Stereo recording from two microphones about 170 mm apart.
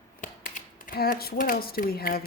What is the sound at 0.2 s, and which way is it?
Speech, 50° left (ahead or behind).